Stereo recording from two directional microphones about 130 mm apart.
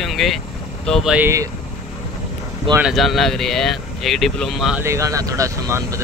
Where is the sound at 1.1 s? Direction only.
20° right (ahead or behind).